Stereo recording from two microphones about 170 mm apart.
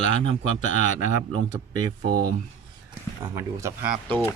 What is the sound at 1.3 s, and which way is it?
Speech, 25° right (ahead or behind).